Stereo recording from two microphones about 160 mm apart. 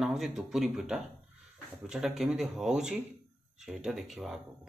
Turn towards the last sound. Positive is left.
turn(degrees=0)  # may be behind; listen again after turning